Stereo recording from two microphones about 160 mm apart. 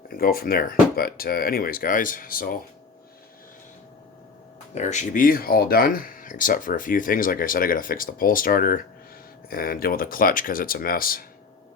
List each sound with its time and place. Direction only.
0.1 s speech: 70° left (ahead or behind)
4.7 s speech: 50° left (ahead or behind); by 11.3 s 65° left (ahead or behind)